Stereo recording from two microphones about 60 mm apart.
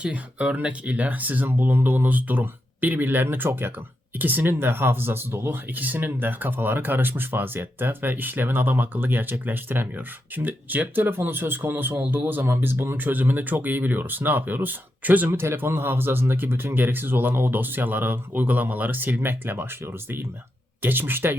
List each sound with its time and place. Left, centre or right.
0.0 s speech: centre; by 5.5 s right
5.7 s speech: right